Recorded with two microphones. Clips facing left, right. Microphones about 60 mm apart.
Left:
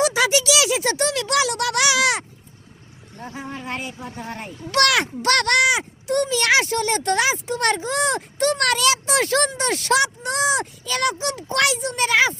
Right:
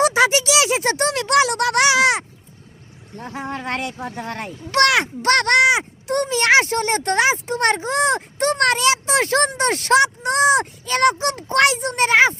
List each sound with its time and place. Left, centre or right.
0.0 s a sound: right
3.2 s speech: right
4.7 s speech: right